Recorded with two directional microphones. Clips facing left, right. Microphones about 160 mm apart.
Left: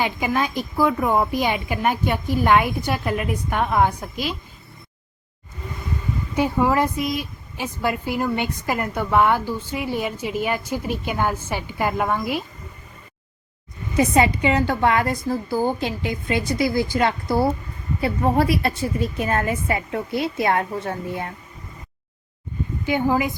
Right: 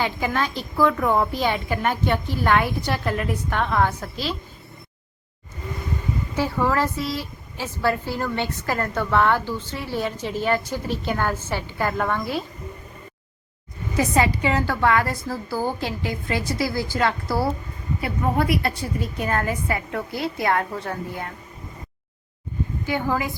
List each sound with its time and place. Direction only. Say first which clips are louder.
0.0 s speech: left 2 dB; 15° left (ahead or behind)
6.3 s speech: left 3 dB; 15° left (ahead or behind)
13.9 s a woman's voice: left 3 dB; 20° left (ahead or behind)
18.0 s a woman's voice: left 4 dB; 30° left (ahead or behind)
22.9 s a woman's voice: left 4 dB; 20° left (ahead or behind)